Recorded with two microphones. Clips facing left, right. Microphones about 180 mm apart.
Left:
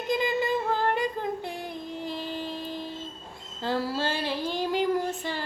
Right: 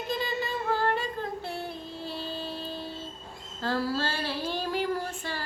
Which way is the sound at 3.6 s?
20° left (ahead or behind).